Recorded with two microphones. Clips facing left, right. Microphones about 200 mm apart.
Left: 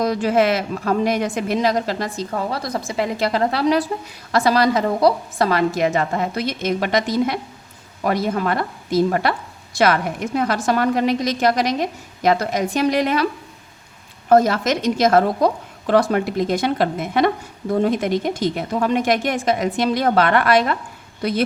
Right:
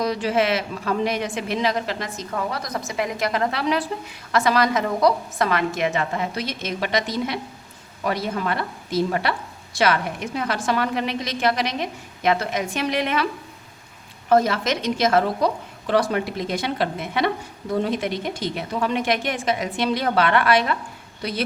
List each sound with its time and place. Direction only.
0.0 s a woman's voice: 50° left (ahead or behind)
14.3 s a woman's voice: 45° left (ahead or behind)